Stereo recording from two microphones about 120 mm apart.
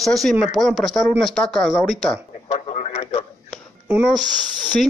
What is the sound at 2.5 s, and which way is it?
Radio, 65° left (ahead or behind).